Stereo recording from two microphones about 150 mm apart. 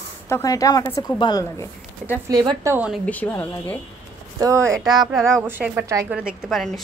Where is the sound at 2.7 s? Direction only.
10° right (ahead or behind).